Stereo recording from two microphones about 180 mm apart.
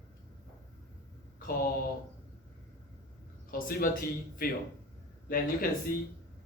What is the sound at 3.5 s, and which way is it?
Speech, 55° left (ahead or behind).